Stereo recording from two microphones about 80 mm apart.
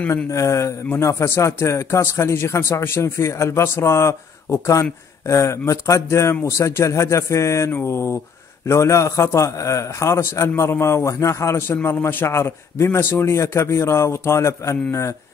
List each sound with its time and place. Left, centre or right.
0.1 s a man's voice: left